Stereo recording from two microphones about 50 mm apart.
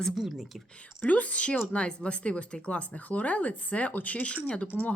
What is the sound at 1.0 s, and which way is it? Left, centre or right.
A woman's voice, left.